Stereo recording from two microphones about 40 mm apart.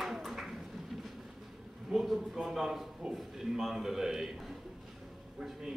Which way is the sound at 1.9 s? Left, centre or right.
Right.